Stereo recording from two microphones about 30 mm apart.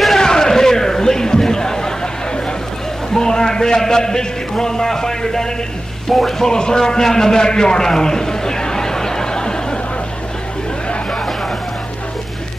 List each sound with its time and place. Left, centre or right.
0.2 s a sound: centre
3.1 s a man's voice: left
6.0 s speech: centre
6.4 s a man's voice: left